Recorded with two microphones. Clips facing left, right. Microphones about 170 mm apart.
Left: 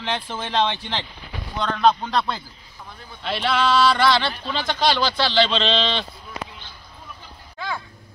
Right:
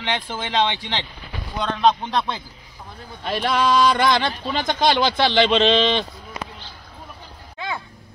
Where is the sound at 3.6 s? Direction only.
15° right (ahead or behind).